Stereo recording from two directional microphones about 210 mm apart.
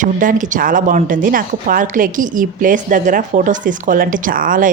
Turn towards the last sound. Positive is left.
turn(degrees=-40)  # may be behind; listen again after turning